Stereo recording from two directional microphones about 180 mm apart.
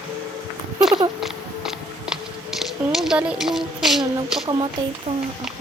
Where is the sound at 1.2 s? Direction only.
Centre (ahead or behind).